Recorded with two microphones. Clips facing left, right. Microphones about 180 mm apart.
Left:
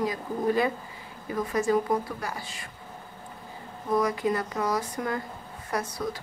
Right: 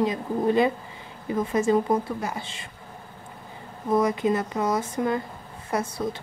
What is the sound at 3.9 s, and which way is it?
Speech, 25° right (ahead or behind).